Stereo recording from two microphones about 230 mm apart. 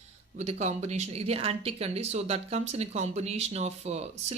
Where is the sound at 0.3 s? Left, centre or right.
Right.